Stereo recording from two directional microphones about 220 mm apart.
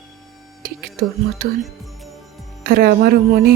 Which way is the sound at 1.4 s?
40° right (ahead or behind).